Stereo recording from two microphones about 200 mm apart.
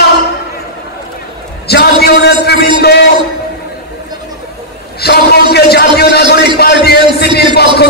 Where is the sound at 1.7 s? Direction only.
55° left (ahead or behind).